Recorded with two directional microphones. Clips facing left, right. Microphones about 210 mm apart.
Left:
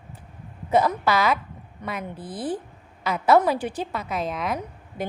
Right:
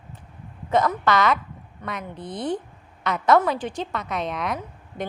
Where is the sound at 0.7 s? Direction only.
10° left (ahead or behind).